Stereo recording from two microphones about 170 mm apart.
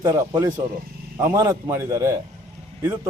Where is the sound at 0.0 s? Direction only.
15° right (ahead or behind).